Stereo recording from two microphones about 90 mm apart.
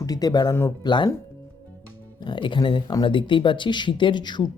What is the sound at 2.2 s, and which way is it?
Speech, 60° left (ahead or behind).